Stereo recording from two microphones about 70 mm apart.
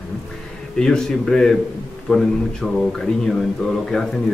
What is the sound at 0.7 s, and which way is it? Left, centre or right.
Speech, centre.